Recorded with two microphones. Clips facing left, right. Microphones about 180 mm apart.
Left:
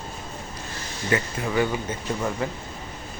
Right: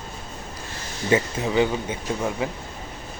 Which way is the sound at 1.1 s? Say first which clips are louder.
Right 4 dB; 20° right (ahead or behind).